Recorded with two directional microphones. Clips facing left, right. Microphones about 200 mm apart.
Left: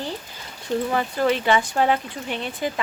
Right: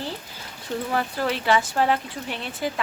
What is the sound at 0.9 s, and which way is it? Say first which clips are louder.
Speech: left 3 dB; centre (ahead or behind).